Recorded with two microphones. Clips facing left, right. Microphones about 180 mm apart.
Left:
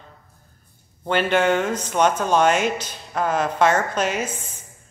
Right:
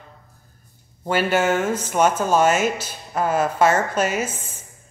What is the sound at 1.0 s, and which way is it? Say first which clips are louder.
Speech: even; 5° right (ahead or behind).